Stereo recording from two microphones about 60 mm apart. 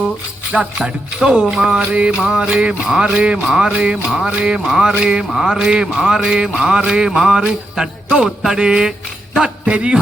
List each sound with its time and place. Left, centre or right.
0.5 s music: centre
2.1 s music: centre
4.6 s music: centre
5.6 s music: centre
9.3 s a sound: centre